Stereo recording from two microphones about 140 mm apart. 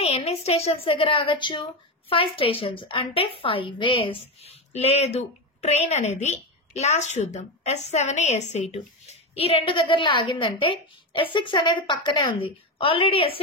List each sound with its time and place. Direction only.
0.0 s a woman's voice: 45° left (ahead or behind)